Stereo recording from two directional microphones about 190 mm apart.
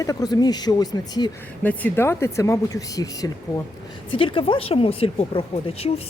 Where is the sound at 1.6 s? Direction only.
10° left (ahead or behind).